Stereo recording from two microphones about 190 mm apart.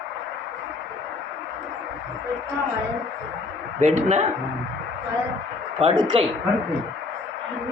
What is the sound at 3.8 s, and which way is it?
Speech, 35° right (ahead or behind).